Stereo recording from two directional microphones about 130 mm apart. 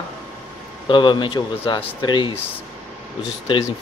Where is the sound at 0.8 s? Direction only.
40° left (ahead or behind).